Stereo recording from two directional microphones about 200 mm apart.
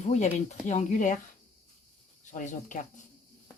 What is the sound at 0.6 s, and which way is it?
Speech, 35° left (ahead or behind).